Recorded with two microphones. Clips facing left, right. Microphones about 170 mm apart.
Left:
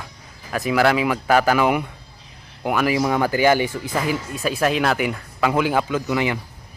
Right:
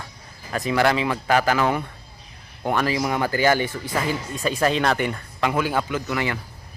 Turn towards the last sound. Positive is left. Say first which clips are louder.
# left 4 dB
turn(degrees=15)  # may be behind; listen again after turning